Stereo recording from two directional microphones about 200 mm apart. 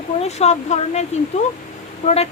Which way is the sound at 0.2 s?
35° left (ahead or behind).